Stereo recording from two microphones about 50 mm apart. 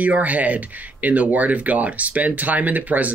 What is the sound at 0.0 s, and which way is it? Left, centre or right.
Speech, right.